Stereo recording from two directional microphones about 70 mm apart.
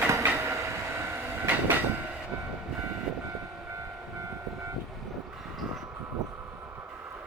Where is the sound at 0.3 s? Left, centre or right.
Right.